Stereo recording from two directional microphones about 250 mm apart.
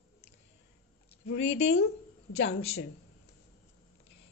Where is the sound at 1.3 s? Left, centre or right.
Left.